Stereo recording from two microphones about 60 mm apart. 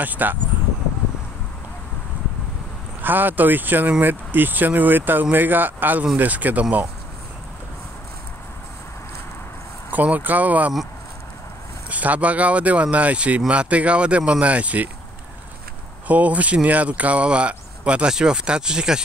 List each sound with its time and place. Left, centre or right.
0.0 s speech: right
3.0 s speech: right
9.8 s speech: right
11.9 s speech: right
16.1 s speech: right